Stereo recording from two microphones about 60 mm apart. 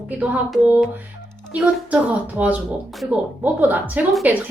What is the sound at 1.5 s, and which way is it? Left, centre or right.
Speech, right.